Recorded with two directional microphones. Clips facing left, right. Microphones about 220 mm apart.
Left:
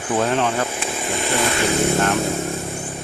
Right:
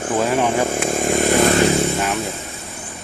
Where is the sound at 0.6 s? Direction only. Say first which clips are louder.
Right 7 dB; 45° right (ahead or behind).